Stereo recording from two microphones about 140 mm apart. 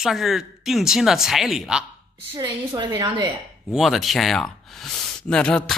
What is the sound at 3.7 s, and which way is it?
Speech, centre (ahead or behind).